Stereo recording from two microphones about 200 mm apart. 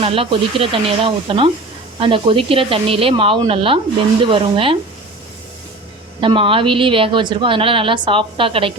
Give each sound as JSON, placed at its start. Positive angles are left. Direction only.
{"t": 0.0, "sound": "a woman's voice", "side_deg": -30}
{"t": 6.1, "sound": "a woman's voice", "side_deg": -25}